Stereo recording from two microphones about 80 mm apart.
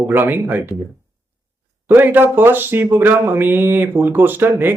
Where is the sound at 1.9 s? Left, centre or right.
Right.